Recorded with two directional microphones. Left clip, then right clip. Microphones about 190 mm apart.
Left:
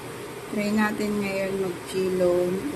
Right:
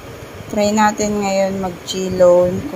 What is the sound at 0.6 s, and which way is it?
Speech, 30° right (ahead or behind).